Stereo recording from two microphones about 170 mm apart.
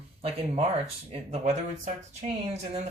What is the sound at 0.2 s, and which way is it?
Speech, 40° right (ahead or behind).